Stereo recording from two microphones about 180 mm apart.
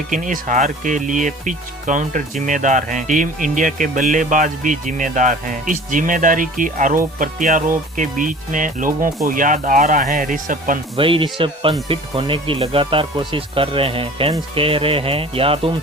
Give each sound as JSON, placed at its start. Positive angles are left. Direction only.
{"t": 0.1, "sound": "speech", "side_deg": -45}
{"t": 10.9, "sound": "speech", "side_deg": -30}